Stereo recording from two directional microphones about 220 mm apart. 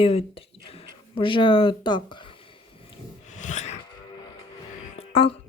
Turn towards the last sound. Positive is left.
turn(degrees=25)  # may be behind; listen again after turning